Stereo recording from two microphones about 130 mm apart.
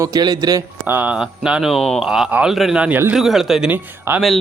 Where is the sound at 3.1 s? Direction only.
Centre (ahead or behind).